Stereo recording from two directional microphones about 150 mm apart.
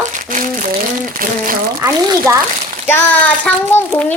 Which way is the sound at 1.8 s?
25° right (ahead or behind).